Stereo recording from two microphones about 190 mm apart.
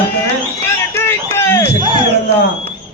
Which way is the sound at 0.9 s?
10° left (ahead or behind).